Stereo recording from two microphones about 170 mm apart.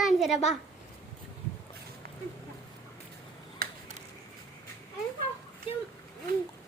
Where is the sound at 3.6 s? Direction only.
60° right (ahead or behind).